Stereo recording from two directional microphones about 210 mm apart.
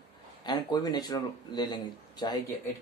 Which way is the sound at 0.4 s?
20° left (ahead or behind).